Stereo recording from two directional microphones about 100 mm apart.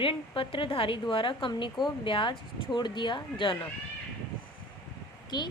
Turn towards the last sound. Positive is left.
turn(degrees=45)  # may be behind; listen again after turning